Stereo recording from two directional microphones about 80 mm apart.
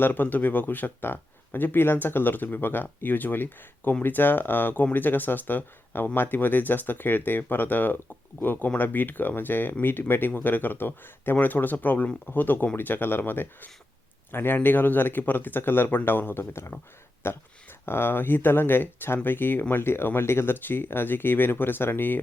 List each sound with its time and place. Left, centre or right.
0.0 s speech: left